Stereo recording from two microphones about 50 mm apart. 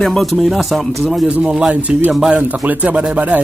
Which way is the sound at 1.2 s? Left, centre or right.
Right.